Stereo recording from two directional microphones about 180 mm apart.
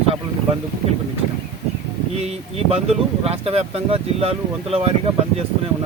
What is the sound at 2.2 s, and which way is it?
Speech, 35° right (ahead or behind).